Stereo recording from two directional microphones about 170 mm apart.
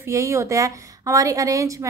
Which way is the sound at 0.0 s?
15° right (ahead or behind).